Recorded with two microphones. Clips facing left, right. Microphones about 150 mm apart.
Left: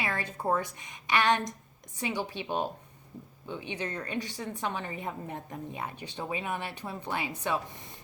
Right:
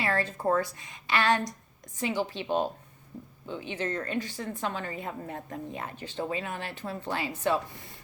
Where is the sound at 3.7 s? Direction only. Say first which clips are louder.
Right 4 dB; 15° left (ahead or behind).